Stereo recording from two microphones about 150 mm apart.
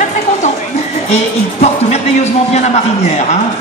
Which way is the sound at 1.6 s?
45° left (ahead or behind).